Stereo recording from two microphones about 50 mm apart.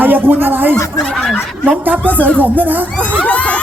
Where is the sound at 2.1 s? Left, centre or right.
Left.